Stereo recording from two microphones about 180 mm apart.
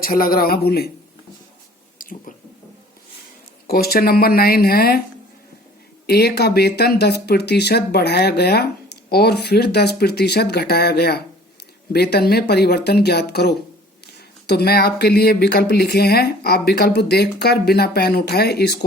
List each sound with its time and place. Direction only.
0.0 s speech: 55° left (ahead or behind)
2.0 s a sound: 50° left (ahead or behind)
3.7 s speech: 60° left (ahead or behind)
6.1 s speech: 65° left (ahead or behind)